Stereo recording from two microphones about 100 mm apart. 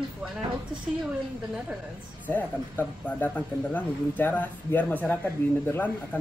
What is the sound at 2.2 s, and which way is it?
Speech, 15° left (ahead or behind).